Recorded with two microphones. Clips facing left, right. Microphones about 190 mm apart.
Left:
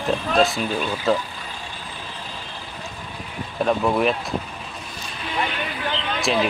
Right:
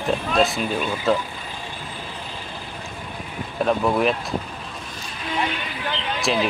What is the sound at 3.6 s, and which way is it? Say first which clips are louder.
Speech: even; centre (ahead or behind).